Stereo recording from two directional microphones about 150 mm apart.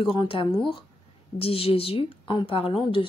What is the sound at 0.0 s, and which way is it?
A woman's voice, 35° left (ahead or behind).